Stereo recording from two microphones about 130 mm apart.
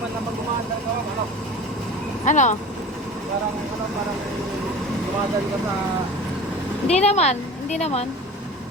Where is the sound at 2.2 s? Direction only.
70° left (ahead or behind).